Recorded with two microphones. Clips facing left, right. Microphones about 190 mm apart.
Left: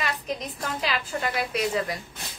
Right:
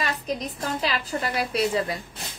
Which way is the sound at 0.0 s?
40° right (ahead or behind).